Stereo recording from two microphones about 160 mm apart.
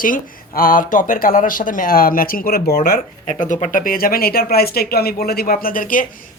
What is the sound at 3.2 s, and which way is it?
Speech, 50° left (ahead or behind).